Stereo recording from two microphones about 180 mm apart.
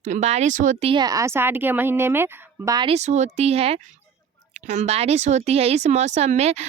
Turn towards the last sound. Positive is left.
turn(degrees=-40)  # may be behind; listen again after turning